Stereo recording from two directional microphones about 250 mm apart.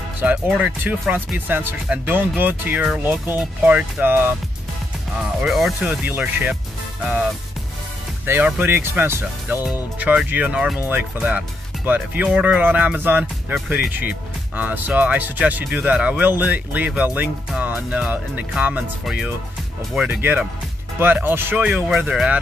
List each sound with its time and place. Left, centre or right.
0.2 s speech: centre
5.4 s speech: centre
8.3 s speech: centre